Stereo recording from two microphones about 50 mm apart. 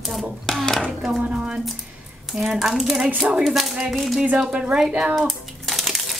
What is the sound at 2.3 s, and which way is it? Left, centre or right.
Speech, centre.